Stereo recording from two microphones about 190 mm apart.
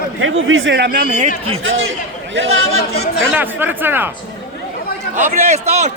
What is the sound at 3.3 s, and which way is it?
Speech, 10° right (ahead or behind).